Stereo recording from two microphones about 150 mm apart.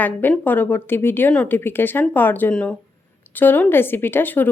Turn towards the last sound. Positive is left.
turn(degrees=15)  # may be behind; listen again after turning